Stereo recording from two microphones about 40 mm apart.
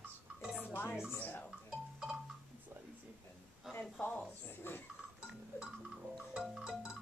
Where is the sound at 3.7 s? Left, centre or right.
Centre.